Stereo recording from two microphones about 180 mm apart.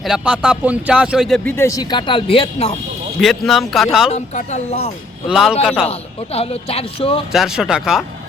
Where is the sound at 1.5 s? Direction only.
15° left (ahead or behind).